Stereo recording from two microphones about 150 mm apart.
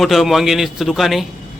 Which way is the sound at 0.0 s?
Centre (ahead or behind).